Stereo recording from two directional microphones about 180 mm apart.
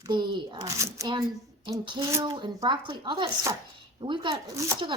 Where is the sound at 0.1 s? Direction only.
25° right (ahead or behind).